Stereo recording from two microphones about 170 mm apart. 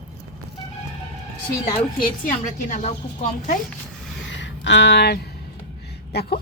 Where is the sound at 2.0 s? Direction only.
55° left (ahead or behind).